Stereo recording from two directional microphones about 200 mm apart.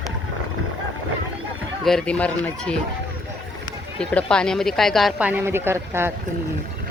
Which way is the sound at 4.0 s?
5° left (ahead or behind).